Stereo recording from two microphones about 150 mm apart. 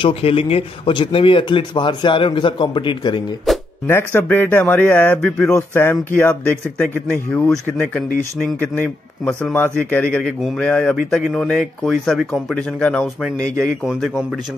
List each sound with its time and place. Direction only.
0.0 s speech: 40° left (ahead or behind)
3.5 s music: centre (ahead or behind)
3.8 s speech: 15° left (ahead or behind)
8.5 s a man's voice: 10° left (ahead or behind)